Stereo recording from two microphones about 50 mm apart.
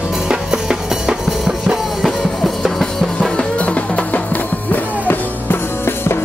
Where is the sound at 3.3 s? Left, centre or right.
Left.